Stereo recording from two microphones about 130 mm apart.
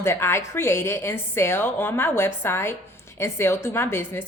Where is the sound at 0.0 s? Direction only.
20° left (ahead or behind).